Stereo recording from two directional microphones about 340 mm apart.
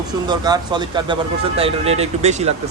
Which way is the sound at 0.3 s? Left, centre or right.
Centre.